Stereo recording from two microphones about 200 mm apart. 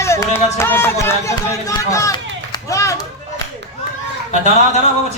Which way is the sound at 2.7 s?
15° left (ahead or behind).